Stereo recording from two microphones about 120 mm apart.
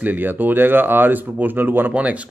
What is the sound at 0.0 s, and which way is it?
A man's voice, 15° right (ahead or behind).